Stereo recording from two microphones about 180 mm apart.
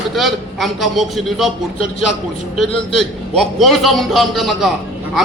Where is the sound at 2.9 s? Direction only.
Centre (ahead or behind).